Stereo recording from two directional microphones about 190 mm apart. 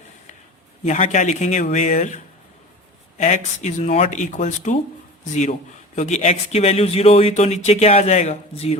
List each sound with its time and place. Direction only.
0.9 s speech: 40° left (ahead or behind)